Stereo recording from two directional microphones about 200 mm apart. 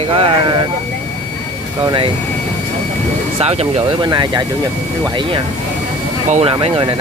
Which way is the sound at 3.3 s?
30° right (ahead or behind).